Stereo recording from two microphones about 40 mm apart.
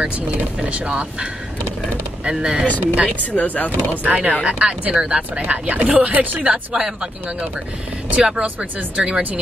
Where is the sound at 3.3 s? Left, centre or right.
Left.